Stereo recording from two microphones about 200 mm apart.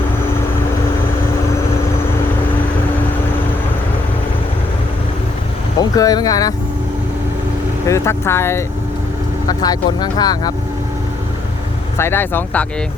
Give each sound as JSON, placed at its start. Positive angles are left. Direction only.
{"t": 5.8, "sound": "speech", "side_deg": 20}
{"t": 7.9, "sound": "speech", "side_deg": 15}
{"t": 11.9, "sound": "speech", "side_deg": 10}